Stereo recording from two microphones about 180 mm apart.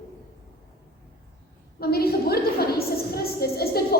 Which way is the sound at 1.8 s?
60° left (ahead or behind).